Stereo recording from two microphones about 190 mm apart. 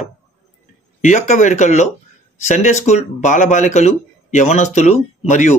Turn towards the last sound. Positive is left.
turn(degrees=40)  # may be behind; listen again after turning